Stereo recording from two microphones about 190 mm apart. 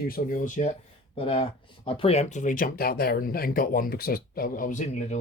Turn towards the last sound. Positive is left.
turn(degrees=40)  # may be behind; listen again after turning